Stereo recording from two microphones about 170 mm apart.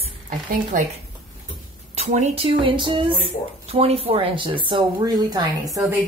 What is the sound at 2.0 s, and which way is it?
Speech, 40° right (ahead or behind).